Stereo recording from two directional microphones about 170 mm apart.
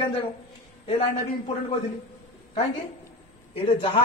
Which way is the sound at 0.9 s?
35° left (ahead or behind).